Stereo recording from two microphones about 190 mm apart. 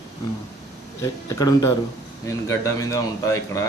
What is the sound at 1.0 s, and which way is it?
A man's voice, 20° left (ahead or behind).